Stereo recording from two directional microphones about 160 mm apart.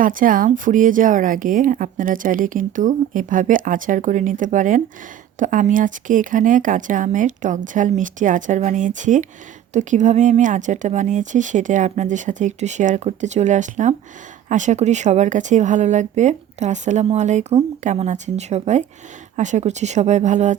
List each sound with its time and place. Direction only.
0.0 s speech: 60° right (ahead or behind)